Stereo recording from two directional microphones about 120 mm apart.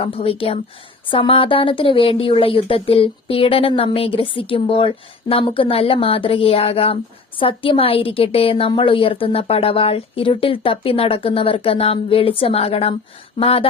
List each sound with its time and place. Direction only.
0.0 s speech: 50° left (ahead or behind)